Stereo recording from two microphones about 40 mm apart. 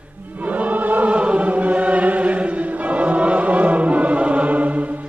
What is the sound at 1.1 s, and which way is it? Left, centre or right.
Chant, right.